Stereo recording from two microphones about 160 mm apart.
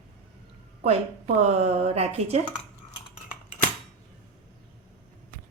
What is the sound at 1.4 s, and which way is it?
Speech, 40° right (ahead or behind).